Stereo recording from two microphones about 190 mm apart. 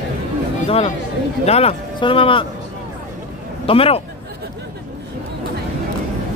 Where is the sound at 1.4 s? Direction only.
30° left (ahead or behind).